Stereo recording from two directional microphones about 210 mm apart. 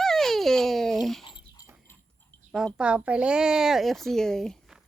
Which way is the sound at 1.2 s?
20° left (ahead or behind).